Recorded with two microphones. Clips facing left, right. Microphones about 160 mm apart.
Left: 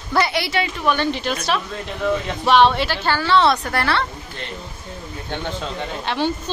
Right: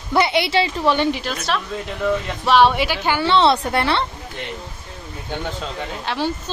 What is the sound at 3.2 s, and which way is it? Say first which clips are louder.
Speech: right 1 dB; 25° right (ahead or behind).